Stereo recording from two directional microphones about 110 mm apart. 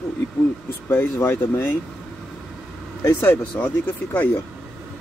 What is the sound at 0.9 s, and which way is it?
Speech, 20° left (ahead or behind).